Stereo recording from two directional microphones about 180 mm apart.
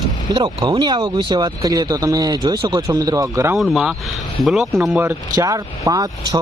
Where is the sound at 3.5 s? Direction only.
Centre (ahead or behind).